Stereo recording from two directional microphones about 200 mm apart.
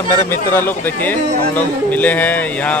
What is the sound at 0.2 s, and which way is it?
A man's voice, 10° left (ahead or behind).